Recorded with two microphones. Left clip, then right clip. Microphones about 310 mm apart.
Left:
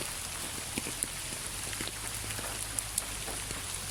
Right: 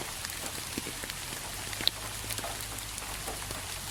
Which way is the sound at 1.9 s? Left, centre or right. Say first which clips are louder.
Right 11 dB; right.